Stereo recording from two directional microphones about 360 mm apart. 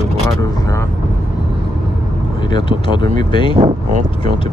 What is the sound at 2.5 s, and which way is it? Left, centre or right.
Speech, centre.